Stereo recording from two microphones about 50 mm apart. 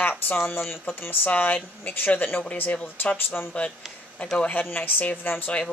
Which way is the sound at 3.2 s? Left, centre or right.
Left.